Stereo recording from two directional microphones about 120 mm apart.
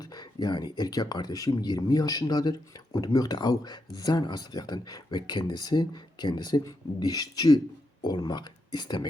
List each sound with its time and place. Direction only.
0.0 s speech: 35° left (ahead or behind)